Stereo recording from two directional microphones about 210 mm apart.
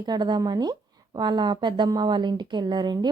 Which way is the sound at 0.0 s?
20° right (ahead or behind).